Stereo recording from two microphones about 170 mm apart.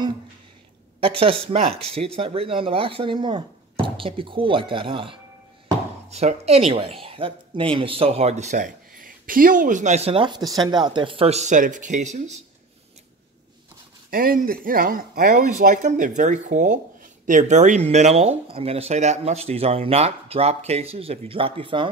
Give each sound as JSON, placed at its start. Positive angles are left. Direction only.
{"t": 1.0, "sound": "speech", "side_deg": -30}
{"t": 14.1, "sound": "speech", "side_deg": -60}